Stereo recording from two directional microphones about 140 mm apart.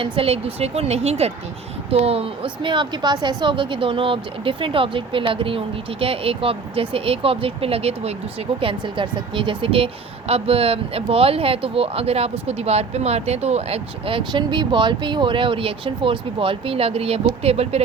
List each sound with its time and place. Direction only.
0.0 s a woman's voice: 40° right (ahead or behind)
8.6 s a woman's voice: 35° right (ahead or behind)